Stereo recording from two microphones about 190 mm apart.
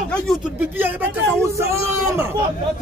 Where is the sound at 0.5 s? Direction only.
10° right (ahead or behind).